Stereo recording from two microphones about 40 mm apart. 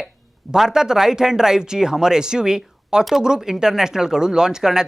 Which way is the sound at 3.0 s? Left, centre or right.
Centre.